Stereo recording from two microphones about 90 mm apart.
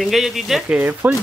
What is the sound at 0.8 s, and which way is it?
Speech, 20° right (ahead or behind).